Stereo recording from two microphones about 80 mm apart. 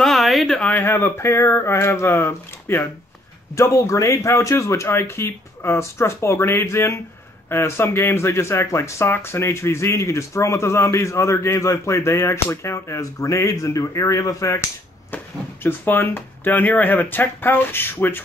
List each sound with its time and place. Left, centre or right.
0.0 s a sound: centre
0.6 s speech: centre
0.8 s speech: left
3.5 s speech: left
15.6 s speech: left